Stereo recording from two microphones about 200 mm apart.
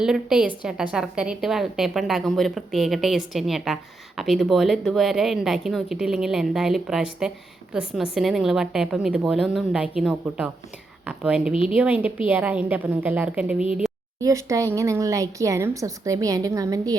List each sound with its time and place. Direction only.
0.0 s speech: 5° right (ahead or behind)
14.2 s speech: 15° right (ahead or behind)